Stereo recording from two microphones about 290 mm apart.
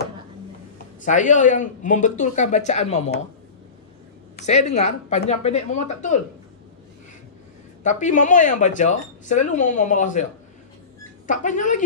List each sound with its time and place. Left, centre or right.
1.0 s speech: left
4.5 s speech: left
7.8 s speech: left
11.2 s speech: left